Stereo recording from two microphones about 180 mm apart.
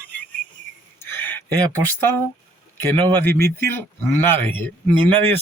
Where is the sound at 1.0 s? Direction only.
10° left (ahead or behind).